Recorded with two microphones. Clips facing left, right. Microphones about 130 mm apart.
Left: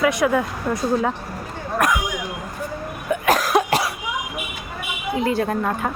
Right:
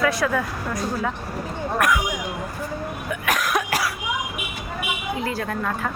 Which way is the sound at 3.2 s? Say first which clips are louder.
Left 5 dB; 30° left (ahead or behind).